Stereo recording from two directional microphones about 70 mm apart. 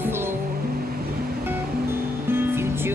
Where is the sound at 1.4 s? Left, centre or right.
Right.